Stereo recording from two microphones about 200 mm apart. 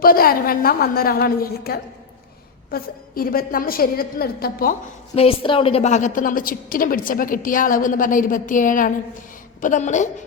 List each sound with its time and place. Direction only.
0.0 s a woman's voice: 45° left (ahead or behind)
5.1 s a woman's voice: 30° left (ahead or behind)